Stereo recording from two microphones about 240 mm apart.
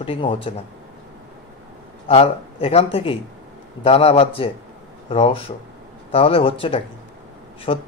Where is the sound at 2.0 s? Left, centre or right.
Left.